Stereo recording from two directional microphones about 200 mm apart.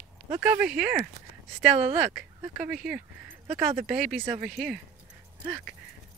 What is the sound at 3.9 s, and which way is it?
Speech, 5° right (ahead or behind).